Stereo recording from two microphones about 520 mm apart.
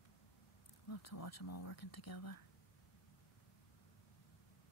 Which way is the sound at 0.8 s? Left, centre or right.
Left.